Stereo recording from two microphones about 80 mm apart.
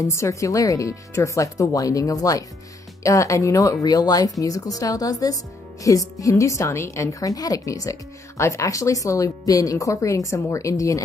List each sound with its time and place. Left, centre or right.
0.0 s speech: left